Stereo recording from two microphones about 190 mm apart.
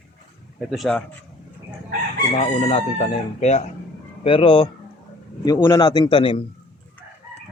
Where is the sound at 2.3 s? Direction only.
30° left (ahead or behind).